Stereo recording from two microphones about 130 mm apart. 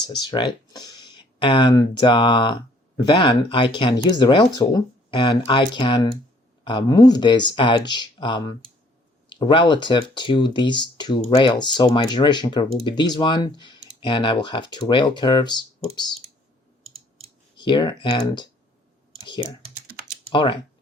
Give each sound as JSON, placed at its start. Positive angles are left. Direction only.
{"t": 0.2, "sound": "speech", "side_deg": 30}
{"t": 17.6, "sound": "speech", "side_deg": 35}
{"t": 20.3, "sound": "speech", "side_deg": 35}